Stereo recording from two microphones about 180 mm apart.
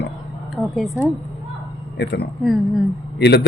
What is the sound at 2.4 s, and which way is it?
Speech, centre (ahead or behind).